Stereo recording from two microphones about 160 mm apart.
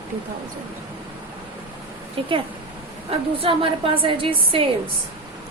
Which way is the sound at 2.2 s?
35° right (ahead or behind).